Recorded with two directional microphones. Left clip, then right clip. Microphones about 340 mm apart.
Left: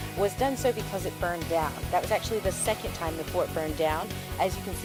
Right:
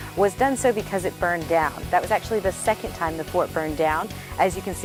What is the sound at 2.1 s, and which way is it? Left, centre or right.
Speech, right.